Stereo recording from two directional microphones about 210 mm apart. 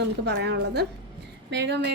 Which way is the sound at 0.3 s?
55° right (ahead or behind).